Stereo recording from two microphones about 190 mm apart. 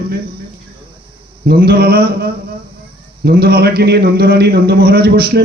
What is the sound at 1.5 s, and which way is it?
A man's voice, 55° right (ahead or behind).